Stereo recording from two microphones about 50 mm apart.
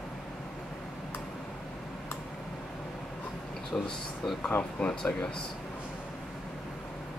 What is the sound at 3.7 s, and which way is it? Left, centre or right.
Speech, left.